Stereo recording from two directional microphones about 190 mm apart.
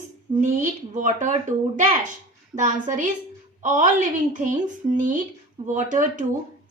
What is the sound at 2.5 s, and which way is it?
A woman's voice, 40° right (ahead or behind).